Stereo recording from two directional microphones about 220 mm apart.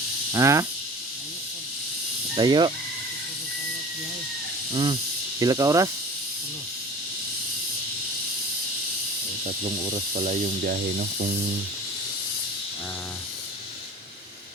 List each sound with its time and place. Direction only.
0.3 s speech: 15° right (ahead or behind)
2.3 s speech: 20° right (ahead or behind)
4.7 s speech: 20° right (ahead or behind)
9.4 s speech: 30° right (ahead or behind)